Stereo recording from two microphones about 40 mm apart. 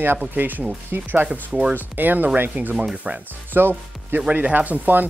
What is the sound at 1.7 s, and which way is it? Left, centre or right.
Speech, right.